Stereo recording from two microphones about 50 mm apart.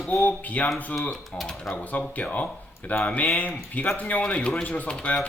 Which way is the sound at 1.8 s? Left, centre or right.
Left.